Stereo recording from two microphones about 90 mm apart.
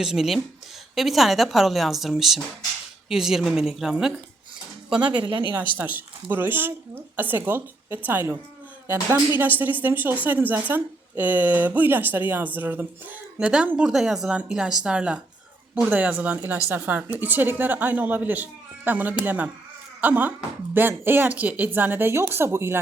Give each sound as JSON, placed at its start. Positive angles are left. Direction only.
{"t": 0.0, "sound": "a woman's voice", "side_deg": -5}
{"t": 5.1, "sound": "speech", "side_deg": -60}
{"t": 5.7, "sound": "a woman's voice", "side_deg": -20}
{"t": 9.4, "sound": "a woman's voice", "side_deg": -20}